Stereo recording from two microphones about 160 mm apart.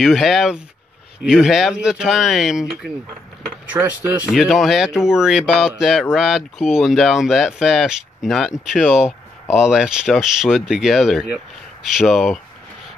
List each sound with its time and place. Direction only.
0.0 s speech: centre (ahead or behind)
3.8 s speech: 20° right (ahead or behind)
4.3 s speech: centre (ahead or behind)